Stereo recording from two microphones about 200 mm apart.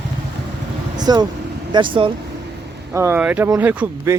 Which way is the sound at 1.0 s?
20° right (ahead or behind).